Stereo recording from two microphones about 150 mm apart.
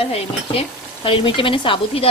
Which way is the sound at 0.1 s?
40° left (ahead or behind).